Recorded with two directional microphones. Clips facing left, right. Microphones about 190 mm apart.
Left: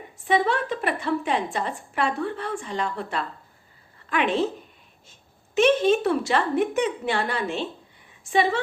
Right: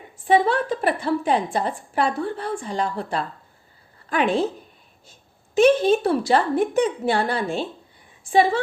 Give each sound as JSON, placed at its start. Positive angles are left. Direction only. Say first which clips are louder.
{"t": 0.3, "sound": "a woman's voice", "louder": "right 4 dB", "side_deg": -35}
{"t": 5.5, "sound": "a woman's voice", "louder": "right 3 dB", "side_deg": -35}